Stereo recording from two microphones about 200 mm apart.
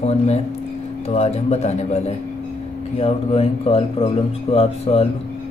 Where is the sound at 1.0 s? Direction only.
30° left (ahead or behind).